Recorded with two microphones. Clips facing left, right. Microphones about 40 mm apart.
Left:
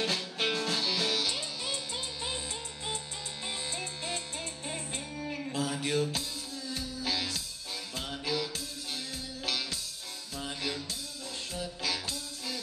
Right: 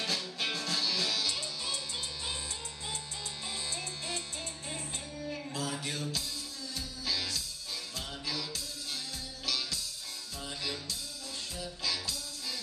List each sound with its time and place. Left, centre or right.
0.0 s music: left
3.4 s music: left
5.3 s music: left
11.5 s music: left